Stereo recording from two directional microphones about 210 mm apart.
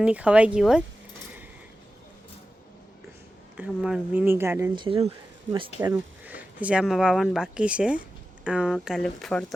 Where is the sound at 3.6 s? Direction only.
5° right (ahead or behind).